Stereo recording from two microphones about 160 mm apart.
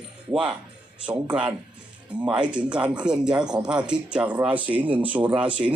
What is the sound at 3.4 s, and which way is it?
Speech, 25° right (ahead or behind).